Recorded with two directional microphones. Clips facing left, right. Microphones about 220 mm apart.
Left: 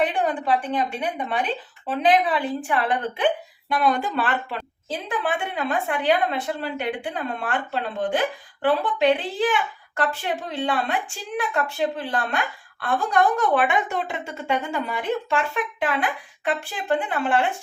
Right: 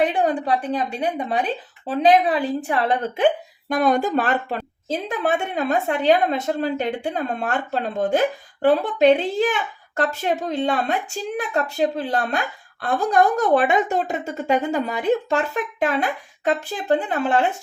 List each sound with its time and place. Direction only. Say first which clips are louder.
0.0 s a woman's voice: right 3 dB; 35° right (ahead or behind)